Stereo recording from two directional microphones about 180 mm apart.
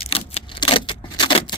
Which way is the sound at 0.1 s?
30° left (ahead or behind).